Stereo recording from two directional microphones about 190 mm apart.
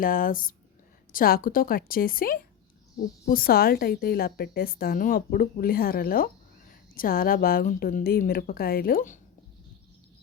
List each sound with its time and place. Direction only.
0.0 s a woman's voice: 45° left (ahead or behind)